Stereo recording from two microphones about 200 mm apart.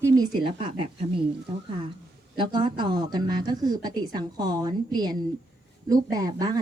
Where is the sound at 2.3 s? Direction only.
25° right (ahead or behind).